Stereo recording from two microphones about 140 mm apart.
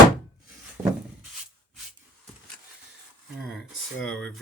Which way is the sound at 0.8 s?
30° right (ahead or behind).